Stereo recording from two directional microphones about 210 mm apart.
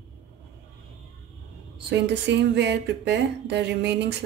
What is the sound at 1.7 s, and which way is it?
Speech, 55° right (ahead or behind).